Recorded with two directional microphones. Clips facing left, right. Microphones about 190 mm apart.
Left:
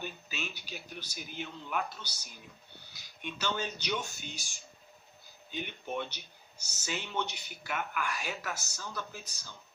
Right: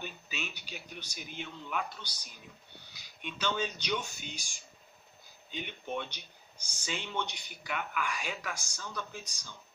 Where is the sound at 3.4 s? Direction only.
10° left (ahead or behind).